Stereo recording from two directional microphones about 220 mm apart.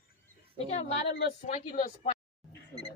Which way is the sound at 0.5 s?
30° left (ahead or behind).